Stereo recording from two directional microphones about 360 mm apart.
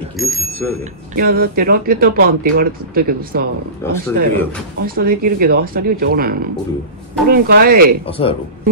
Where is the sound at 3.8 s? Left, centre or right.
Centre.